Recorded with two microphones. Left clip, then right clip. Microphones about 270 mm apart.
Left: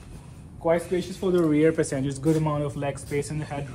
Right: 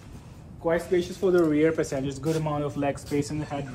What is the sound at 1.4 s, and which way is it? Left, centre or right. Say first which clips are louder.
A man's voice: left 2 dB; left.